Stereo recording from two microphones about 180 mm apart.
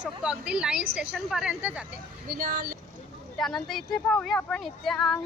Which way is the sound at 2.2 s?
50° right (ahead or behind).